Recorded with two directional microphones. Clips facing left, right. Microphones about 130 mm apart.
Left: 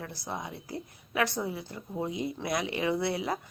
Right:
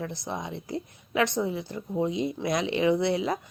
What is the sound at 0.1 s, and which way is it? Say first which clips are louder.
A woman's voice: right 4 dB; 20° right (ahead or behind).